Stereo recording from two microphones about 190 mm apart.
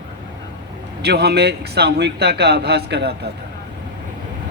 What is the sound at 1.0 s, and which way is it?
Speech, 60° right (ahead or behind).